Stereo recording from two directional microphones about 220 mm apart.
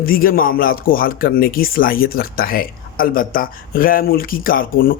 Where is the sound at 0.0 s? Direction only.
40° left (ahead or behind).